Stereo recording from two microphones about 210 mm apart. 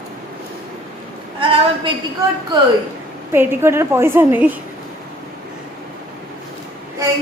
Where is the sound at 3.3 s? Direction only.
10° right (ahead or behind).